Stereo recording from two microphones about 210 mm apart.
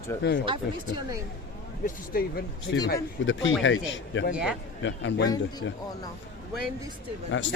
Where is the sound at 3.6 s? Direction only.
60° left (ahead or behind).